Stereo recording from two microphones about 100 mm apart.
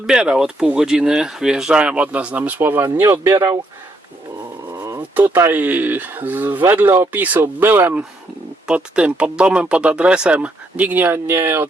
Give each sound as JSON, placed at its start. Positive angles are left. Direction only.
{"t": 0.1, "sound": "speech", "side_deg": -5}
{"t": 4.7, "sound": "a sound", "side_deg": -35}
{"t": 5.1, "sound": "speech", "side_deg": -20}